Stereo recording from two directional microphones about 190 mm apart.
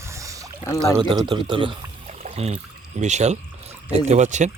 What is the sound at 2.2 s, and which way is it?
Trickle, 35° right (ahead or behind).